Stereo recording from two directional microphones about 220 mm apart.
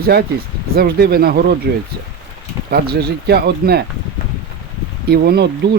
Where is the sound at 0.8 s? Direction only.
45° right (ahead or behind).